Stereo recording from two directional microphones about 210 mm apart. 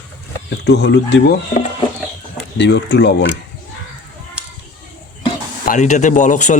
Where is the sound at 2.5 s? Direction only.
55° left (ahead or behind).